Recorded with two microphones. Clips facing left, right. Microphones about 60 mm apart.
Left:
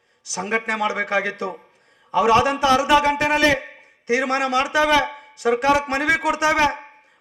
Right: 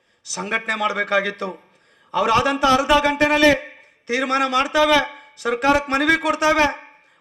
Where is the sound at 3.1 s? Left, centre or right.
Right.